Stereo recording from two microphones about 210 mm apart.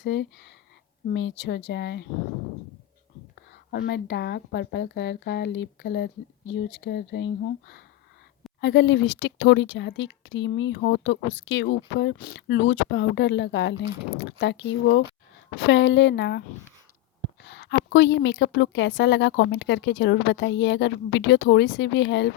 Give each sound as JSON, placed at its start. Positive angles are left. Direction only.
{"t": 0.0, "sound": "a woman's voice", "side_deg": 55}
{"t": 3.8, "sound": "a woman's voice", "side_deg": 55}
{"t": 17.4, "sound": "a woman's voice", "side_deg": 55}